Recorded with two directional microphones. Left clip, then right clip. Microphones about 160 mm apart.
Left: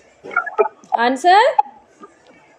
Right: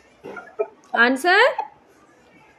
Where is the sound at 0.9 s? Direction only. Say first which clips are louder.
Left 4 dB; 15° right (ahead or behind).